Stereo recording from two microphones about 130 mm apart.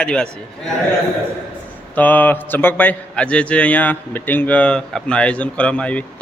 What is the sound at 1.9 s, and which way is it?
A man's voice, 10° left (ahead or behind).